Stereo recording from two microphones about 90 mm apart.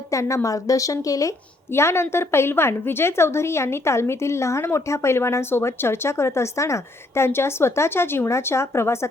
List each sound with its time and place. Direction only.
0.1 s a woman's voice: 35° left (ahead or behind)
1.7 s a woman's voice: 30° left (ahead or behind)